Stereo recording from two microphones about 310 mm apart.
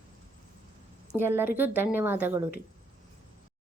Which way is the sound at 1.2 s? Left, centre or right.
Centre.